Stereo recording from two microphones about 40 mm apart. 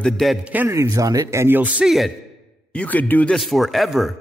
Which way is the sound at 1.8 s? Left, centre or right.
Right.